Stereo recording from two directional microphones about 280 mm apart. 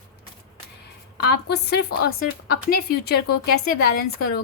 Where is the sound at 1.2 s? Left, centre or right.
Left.